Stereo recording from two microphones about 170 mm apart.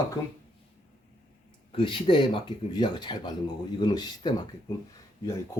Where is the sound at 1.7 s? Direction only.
30° left (ahead or behind).